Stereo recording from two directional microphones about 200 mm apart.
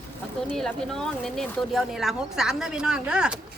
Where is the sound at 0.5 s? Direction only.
Centre (ahead or behind).